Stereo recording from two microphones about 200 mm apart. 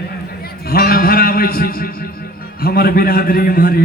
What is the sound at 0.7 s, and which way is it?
A man's voice, 45° left (ahead or behind).